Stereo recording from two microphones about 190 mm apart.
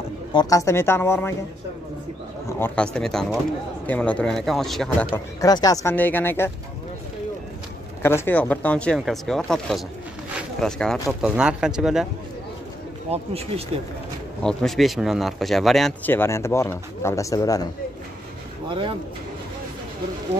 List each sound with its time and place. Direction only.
0.3 s speech: 20° left (ahead or behind)
2.6 s speech: 5° left (ahead or behind)
5.1 s speech: 20° left (ahead or behind)
8.0 s speech: 10° left (ahead or behind)
13.1 s speech: 30° right (ahead or behind)
14.4 s speech: 5° left (ahead or behind); by 17.6 s 20° left (ahead or behind)
18.7 s speech: 25° right (ahead or behind)